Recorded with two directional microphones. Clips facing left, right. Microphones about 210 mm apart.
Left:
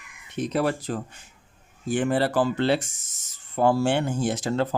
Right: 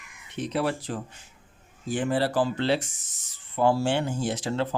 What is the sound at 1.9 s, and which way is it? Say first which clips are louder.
Speech: left 3 dB; 55° left (ahead or behind).